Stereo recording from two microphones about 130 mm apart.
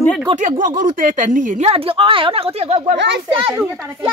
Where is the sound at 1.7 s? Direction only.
45° right (ahead or behind).